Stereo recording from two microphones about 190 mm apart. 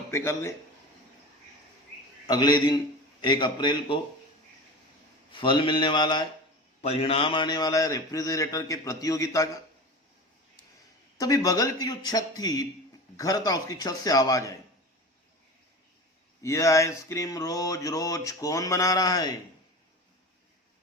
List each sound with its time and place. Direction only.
0.1 s a man's voice: 15° left (ahead or behind)
2.2 s a man's voice: 20° left (ahead or behind)
5.3 s a man's voice: 25° left (ahead or behind)
11.2 s a man's voice: 20° left (ahead or behind)
16.4 s a man's voice: 15° left (ahead or behind)